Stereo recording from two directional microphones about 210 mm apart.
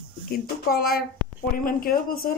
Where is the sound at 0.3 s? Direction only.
45° left (ahead or behind).